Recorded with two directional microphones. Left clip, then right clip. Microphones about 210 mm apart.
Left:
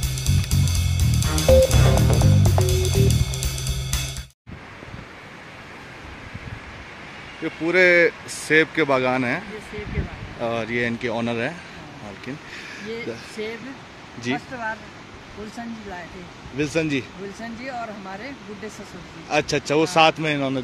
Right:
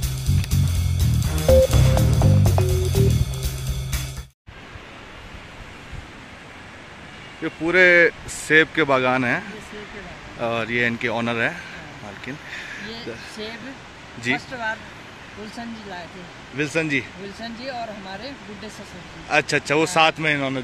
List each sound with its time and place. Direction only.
0.4 s music: centre (ahead or behind)
7.4 s speech: centre (ahead or behind)
10.4 s speech: 5° left (ahead or behind)
14.2 s speech: 15° left (ahead or behind)
16.5 s speech: 20° left (ahead or behind)
19.2 s speech: 15° left (ahead or behind)